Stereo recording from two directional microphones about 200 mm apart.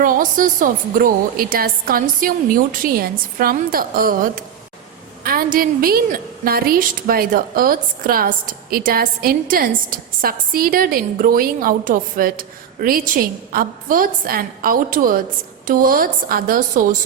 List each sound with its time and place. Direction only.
0.0 s a woman's voice: 45° right (ahead or behind)